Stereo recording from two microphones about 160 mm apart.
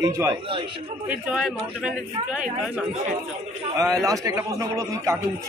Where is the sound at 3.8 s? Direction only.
20° right (ahead or behind).